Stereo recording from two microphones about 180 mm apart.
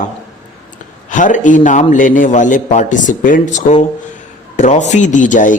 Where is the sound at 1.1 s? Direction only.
45° left (ahead or behind).